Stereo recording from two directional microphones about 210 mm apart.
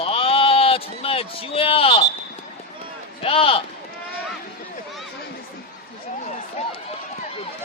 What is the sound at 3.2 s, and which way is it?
Speech, 25° left (ahead or behind).